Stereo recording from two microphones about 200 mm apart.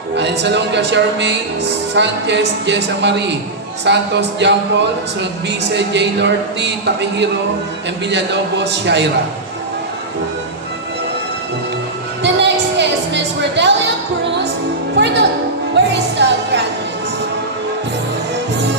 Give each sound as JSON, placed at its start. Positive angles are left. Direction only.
{"t": 0.2, "sound": "speech", "side_deg": -60}
{"t": 12.2, "sound": "a sound", "side_deg": -60}
{"t": 14.9, "sound": "speech", "side_deg": -60}
{"t": 15.7, "sound": "music", "side_deg": -60}